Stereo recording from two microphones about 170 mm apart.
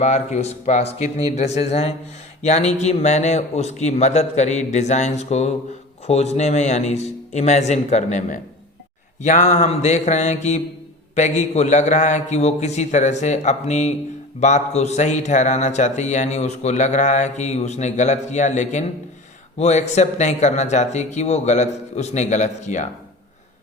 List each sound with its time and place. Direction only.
0.0 s a man's voice: 40° left (ahead or behind)